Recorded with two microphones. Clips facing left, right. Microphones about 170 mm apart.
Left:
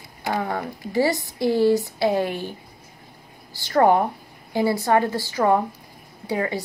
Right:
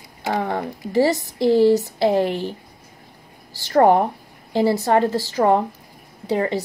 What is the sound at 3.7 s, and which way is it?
A woman's voice, 30° right (ahead or behind).